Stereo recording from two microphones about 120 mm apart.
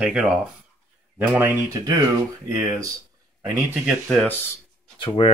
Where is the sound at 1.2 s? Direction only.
15° right (ahead or behind).